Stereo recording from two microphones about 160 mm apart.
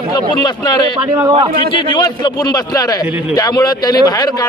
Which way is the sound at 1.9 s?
25° left (ahead or behind).